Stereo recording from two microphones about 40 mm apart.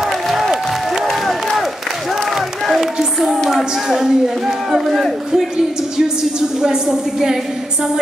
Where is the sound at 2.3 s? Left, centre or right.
Centre.